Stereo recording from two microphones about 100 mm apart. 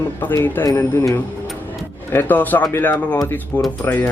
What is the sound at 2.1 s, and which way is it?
Speech, 20° left (ahead or behind).